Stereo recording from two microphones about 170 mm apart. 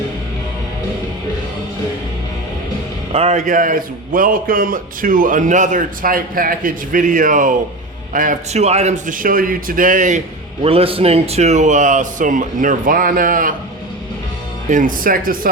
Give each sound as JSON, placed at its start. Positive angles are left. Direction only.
{"t": 3.1, "sound": "a man's voice", "side_deg": -40}
{"t": 10.6, "sound": "a man's voice", "side_deg": -35}
{"t": 14.7, "sound": "speech", "side_deg": -50}